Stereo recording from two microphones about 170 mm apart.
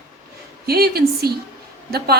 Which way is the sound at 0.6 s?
65° right (ahead or behind).